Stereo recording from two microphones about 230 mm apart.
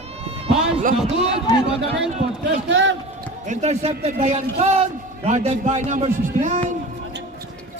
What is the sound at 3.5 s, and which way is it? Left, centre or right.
A man's voice, right.